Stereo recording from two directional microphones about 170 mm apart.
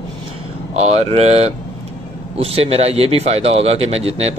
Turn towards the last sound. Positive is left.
turn(degrees=-40)  # may be behind; listen again after turning